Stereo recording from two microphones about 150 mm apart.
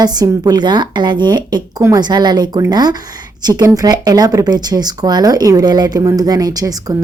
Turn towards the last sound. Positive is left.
turn(degrees=-25)  # may be behind; listen again after turning